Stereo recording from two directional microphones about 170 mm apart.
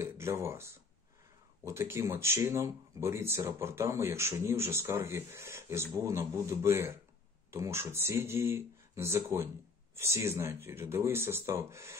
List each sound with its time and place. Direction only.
0.0 s speech: 15° right (ahead or behind)